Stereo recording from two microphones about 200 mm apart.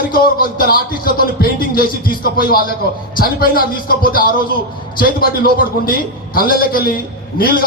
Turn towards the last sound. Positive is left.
turn(degrees=45)  # may be behind; listen again after turning